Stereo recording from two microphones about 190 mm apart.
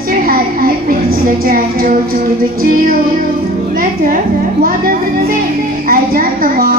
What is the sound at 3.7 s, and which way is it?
Speech, 50° right (ahead or behind).